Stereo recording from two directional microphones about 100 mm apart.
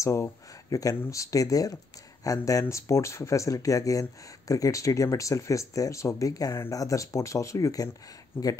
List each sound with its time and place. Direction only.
0.0 s speech: 30° left (ahead or behind)
8.3 s speech: 25° left (ahead or behind)